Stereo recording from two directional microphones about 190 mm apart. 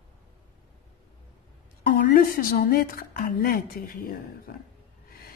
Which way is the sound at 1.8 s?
50° left (ahead or behind).